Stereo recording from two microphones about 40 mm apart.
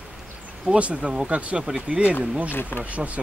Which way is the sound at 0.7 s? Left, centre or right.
Right.